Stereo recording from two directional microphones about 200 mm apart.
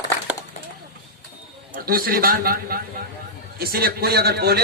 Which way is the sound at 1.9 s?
45° right (ahead or behind).